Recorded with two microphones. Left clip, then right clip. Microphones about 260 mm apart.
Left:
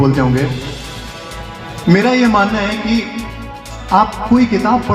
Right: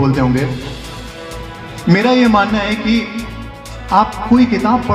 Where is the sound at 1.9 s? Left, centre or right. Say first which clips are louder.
Even; right.